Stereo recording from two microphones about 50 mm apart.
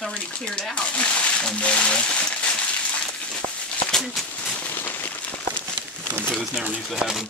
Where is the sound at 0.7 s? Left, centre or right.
Left.